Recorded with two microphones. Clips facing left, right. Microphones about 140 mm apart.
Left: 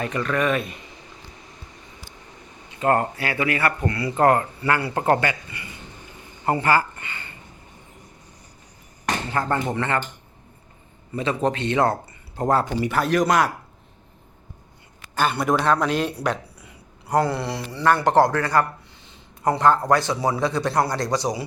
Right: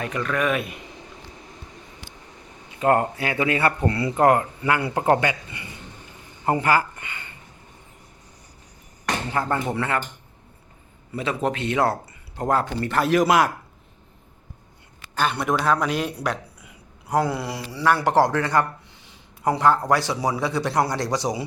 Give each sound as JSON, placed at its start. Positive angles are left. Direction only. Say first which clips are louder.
{"t": 0.0, "sound": "speech", "louder": "left 1 dB", "side_deg": 0}
{"t": 2.8, "sound": "speech", "louder": "right 1 dB", "side_deg": -15}
{"t": 4.1, "sound": "speech", "louder": "left 1 dB", "side_deg": -15}
{"t": 9.3, "sound": "speech", "louder": "left 1 dB", "side_deg": -10}
{"t": 11.1, "sound": "speech", "louder": "left 2 dB", "side_deg": 0}
{"t": 15.1, "sound": "speech", "louder": "left 2 dB", "side_deg": 5}
{"t": 19.0, "sound": "a sound", "louder": "left 1 dB", "side_deg": -10}
{"t": 19.9, "sound": "speech", "louder": "left 1 dB", "side_deg": -10}